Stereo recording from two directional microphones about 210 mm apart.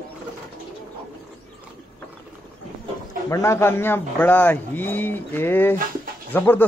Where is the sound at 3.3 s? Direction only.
15° left (ahead or behind).